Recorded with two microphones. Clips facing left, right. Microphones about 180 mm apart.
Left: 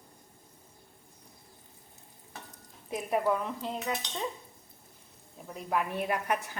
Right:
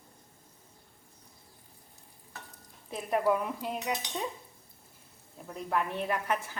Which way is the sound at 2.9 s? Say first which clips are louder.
Left 1 dB; 5° left (ahead or behind).